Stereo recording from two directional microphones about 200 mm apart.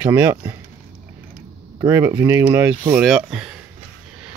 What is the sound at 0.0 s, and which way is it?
Speech, 10° right (ahead or behind).